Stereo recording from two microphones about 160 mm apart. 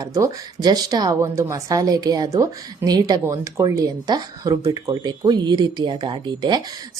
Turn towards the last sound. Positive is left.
turn(degrees=-25)  # may be behind; listen again after turning